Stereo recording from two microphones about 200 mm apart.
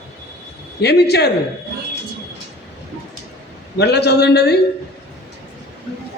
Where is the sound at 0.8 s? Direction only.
55° left (ahead or behind).